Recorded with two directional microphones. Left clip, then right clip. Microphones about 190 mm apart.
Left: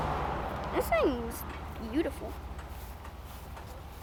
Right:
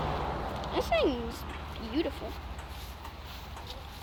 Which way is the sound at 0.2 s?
5° right (ahead or behind).